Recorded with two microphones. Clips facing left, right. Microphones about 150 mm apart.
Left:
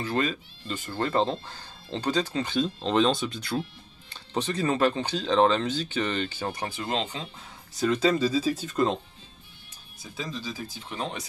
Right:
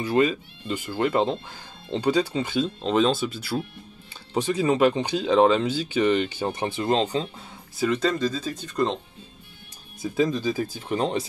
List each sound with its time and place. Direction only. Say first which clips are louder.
0.0 s speech: right 6 dB; 15° right (ahead or behind)
6.8 s speech: right 9 dB; 35° right (ahead or behind)
7.8 s speech: even; centre (ahead or behind)
10.1 s speech: right 12 dB; 55° right (ahead or behind)